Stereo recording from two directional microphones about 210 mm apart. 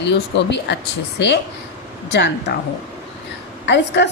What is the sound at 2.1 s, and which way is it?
Speech, 55° left (ahead or behind).